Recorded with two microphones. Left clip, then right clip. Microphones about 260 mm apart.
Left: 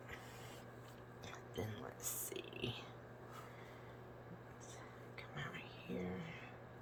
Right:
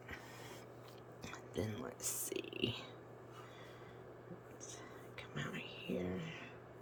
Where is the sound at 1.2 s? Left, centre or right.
Right.